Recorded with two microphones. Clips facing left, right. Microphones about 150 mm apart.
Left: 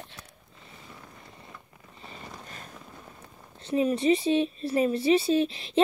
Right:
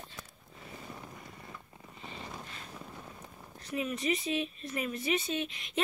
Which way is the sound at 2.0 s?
45° left (ahead or behind).